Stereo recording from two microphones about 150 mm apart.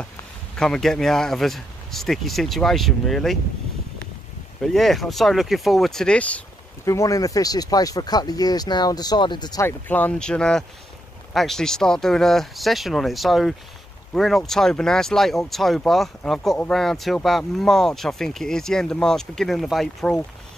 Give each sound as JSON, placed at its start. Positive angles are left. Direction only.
{"t": 0.6, "sound": "speech", "side_deg": 5}
{"t": 4.6, "sound": "speech", "side_deg": 0}
{"t": 6.8, "sound": "speech", "side_deg": 20}